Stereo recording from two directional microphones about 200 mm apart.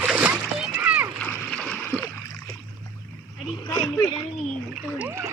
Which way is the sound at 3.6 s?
20° left (ahead or behind).